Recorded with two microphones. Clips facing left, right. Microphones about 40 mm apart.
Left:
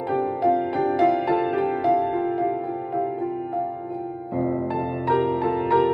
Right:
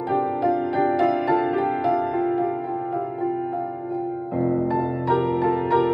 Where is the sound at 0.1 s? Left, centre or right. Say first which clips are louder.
Even; right.